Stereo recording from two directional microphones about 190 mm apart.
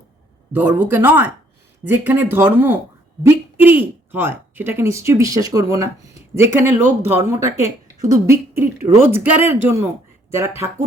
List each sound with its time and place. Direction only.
0.5 s speech: 10° right (ahead or behind)